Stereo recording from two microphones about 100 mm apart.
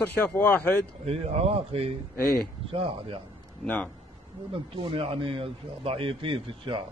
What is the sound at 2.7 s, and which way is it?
Speech, 65° right (ahead or behind).